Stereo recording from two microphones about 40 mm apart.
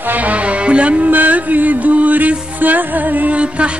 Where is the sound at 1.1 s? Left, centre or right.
Right.